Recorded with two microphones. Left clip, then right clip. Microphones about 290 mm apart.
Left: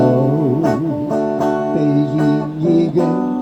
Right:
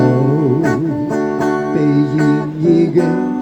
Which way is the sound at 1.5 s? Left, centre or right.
Right.